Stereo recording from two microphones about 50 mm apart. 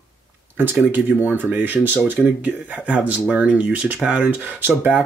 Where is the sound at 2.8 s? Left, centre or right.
Right.